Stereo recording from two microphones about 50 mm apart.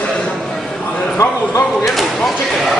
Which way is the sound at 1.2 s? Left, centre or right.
Left.